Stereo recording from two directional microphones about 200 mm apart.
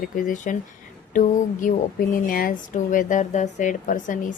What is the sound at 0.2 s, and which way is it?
A woman's voice, 40° left (ahead or behind).